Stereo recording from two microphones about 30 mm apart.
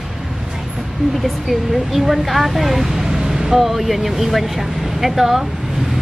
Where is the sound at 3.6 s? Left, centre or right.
Centre.